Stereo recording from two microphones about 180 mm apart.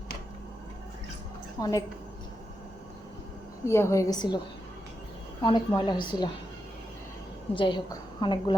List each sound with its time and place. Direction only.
1.5 s a woman's voice: 20° left (ahead or behind)
3.7 s a woman's voice: 15° left (ahead or behind)
5.4 s a woman's voice: 25° left (ahead or behind)
7.5 s a woman's voice: 30° left (ahead or behind)